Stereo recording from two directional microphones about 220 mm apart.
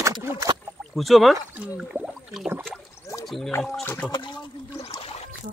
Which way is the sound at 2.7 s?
10° left (ahead or behind).